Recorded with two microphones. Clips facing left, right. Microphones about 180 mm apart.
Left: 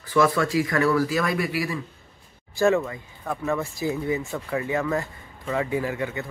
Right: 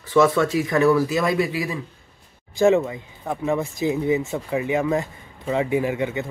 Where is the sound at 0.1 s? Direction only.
20° right (ahead or behind).